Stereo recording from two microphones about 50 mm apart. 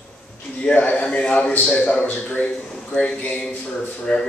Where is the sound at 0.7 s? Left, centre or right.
Left.